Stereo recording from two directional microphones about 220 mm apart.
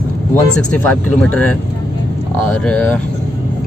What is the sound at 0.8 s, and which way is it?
Speech, 5° left (ahead or behind).